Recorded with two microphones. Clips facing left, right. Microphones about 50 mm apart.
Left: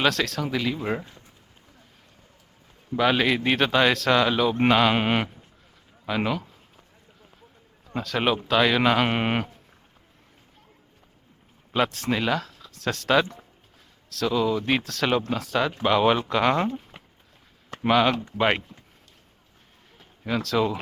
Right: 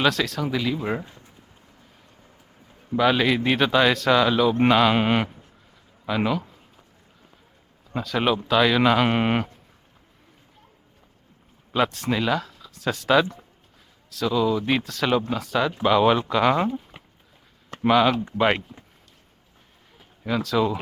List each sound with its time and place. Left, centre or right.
0.0 s speech: centre
3.0 s speech: centre
7.9 s speech: centre
11.7 s speech: centre
20.2 s speech: centre